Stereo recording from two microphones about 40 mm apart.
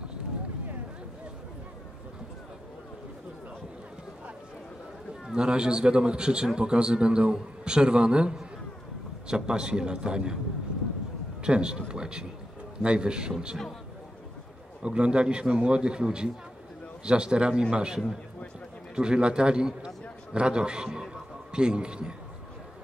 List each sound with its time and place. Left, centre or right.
5.3 s a man's voice: right
11.4 s a man's voice: right
14.8 s a man's voice: right